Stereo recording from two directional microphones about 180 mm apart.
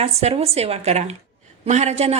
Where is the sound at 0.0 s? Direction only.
35° right (ahead or behind).